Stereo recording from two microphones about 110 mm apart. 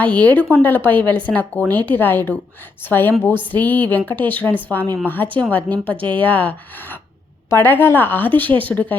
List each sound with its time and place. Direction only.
0.0 s speech: 15° left (ahead or behind)